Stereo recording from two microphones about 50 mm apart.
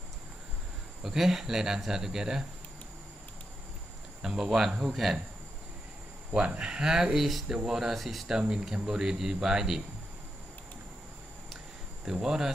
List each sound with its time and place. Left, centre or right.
1.0 s speech: centre
4.2 s speech: centre
6.3 s speech: right
6.7 s speech: centre
8.3 s speech: centre
12.0 s speech: centre